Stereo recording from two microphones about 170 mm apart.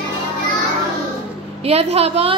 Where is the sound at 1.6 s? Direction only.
40° right (ahead or behind).